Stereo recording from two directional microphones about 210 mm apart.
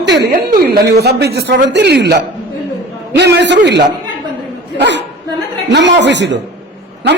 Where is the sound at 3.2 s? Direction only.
55° right (ahead or behind).